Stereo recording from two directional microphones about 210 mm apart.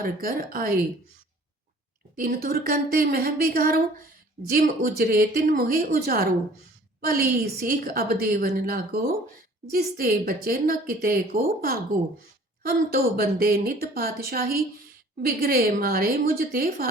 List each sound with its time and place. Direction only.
0.0 s a woman's voice: 45° right (ahead or behind)
2.1 s a woman's voice: 45° right (ahead or behind)